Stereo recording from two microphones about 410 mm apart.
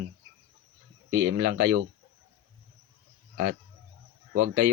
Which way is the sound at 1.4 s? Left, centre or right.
Right.